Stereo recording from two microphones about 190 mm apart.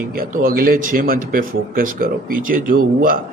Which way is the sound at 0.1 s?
50° right (ahead or behind).